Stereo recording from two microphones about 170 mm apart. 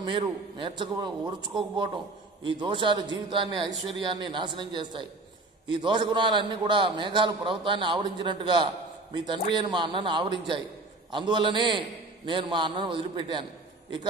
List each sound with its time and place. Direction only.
0.0 s a man's voice: 30° right (ahead or behind)